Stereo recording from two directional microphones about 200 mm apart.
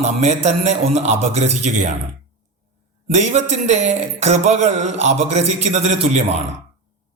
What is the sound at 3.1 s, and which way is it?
A man's voice, 35° right (ahead or behind).